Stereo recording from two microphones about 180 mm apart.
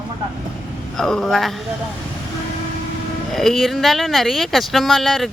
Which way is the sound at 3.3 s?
Centre (ahead or behind).